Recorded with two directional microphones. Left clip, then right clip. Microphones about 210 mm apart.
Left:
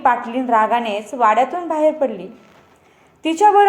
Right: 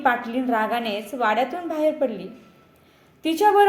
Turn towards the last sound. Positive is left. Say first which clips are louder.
# left 5 dB
turn(degrees=0)  # may be behind; listen again after turning